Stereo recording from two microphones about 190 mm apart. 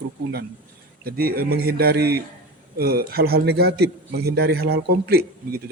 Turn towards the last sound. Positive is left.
turn(degrees=-55)  # may be behind; listen again after turning